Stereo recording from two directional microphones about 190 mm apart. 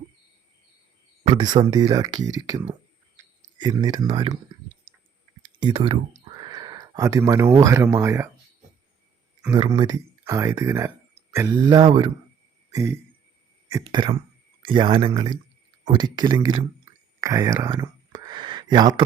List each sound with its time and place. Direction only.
1.4 s speech: 20° right (ahead or behind)
3.6 s speech: 20° right (ahead or behind)
5.4 s speech: 25° right (ahead or behind)
9.6 s speech: 25° right (ahead or behind)
12.7 s a sound: 15° right (ahead or behind)
13.7 s speech: 15° right (ahead or behind)